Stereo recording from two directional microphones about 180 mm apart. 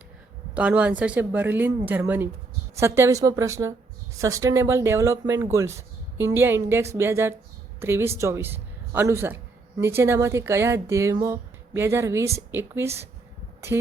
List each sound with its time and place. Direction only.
0.5 s a man's voice: 5° right (ahead or behind)